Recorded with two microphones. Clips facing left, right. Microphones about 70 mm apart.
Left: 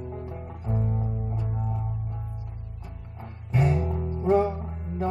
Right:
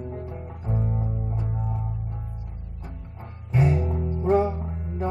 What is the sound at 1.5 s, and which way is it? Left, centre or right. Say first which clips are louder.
Music: right 1 dB; centre.